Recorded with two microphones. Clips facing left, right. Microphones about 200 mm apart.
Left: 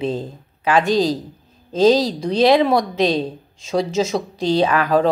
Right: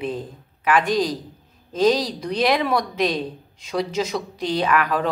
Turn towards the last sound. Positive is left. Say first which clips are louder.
# left 5 dB
turn(degrees=30)  # may be behind; listen again after turning